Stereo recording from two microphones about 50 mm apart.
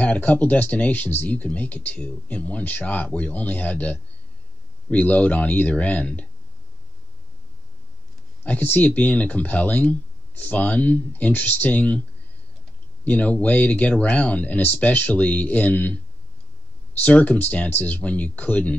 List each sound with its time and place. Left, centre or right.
0.0 s speech: left
8.5 s speech: left
13.0 s speech: left
17.0 s speech: left